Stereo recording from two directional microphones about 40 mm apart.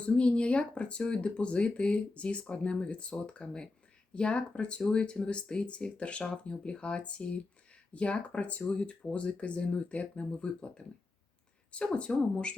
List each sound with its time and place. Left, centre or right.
0.0 s speech: left
12.1 s speech: centre